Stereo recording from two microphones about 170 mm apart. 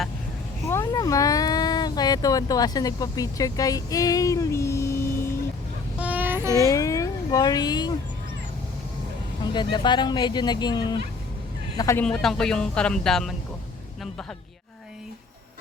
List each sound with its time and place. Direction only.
0.6 s speech: 15° left (ahead or behind)
6.0 s a sound: 10° right (ahead or behind)
6.7 s speech: 20° left (ahead or behind)
9.4 s speech: 25° left (ahead or behind)
12.0 s speech: 5° left (ahead or behind)